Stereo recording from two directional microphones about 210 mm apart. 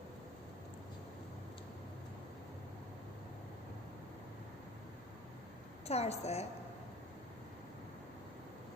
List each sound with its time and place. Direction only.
5.9 s a woman's voice: 30° left (ahead or behind)